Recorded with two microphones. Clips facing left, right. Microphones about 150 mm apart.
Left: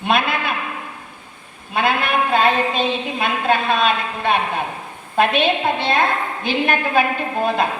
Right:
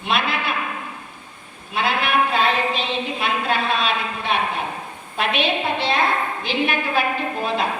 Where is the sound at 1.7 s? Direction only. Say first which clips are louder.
Left 2 dB; 50° left (ahead or behind).